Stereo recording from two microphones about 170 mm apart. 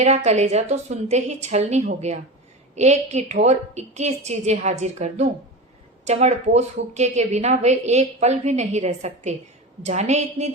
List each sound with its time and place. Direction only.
0.0 s a woman's voice: 40° right (ahead or behind)